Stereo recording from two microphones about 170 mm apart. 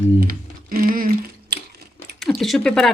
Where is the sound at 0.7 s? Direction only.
55° right (ahead or behind).